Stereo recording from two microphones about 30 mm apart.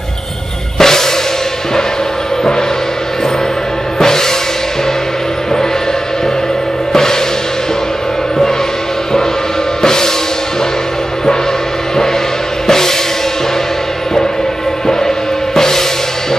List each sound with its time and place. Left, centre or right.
0.7 s music: centre
4.0 s music: centre
6.9 s music: centre
9.8 s music: centre
12.6 s music: centre
15.5 s music: centre